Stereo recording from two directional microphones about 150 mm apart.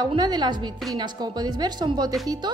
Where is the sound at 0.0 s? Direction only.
25° right (ahead or behind).